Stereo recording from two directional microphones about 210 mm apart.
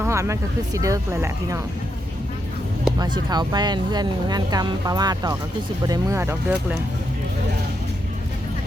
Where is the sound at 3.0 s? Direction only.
20° right (ahead or behind).